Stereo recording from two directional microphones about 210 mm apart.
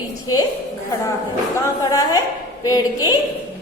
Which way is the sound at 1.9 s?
15° left (ahead or behind).